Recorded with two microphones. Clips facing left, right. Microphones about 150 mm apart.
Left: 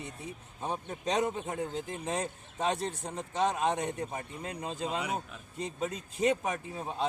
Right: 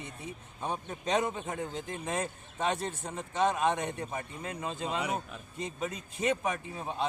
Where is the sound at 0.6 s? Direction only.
35° left (ahead or behind).